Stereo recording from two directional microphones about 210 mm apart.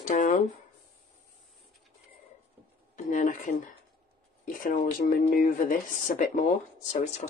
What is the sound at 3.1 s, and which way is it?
Speech, 35° left (ahead or behind).